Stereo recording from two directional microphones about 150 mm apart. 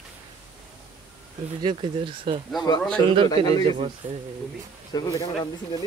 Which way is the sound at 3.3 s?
25° left (ahead or behind).